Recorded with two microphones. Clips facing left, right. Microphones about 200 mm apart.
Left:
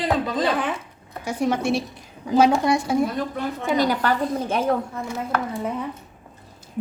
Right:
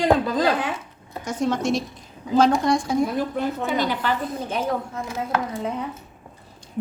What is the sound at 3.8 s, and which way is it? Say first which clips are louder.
Speech: left 3 dB; 45° left (ahead or behind).